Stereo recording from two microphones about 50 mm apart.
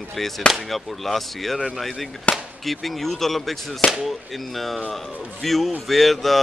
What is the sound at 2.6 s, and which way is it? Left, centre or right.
Speech, centre.